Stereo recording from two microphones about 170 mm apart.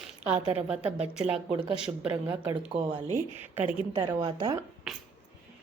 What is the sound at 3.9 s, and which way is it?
Speech, 25° right (ahead or behind).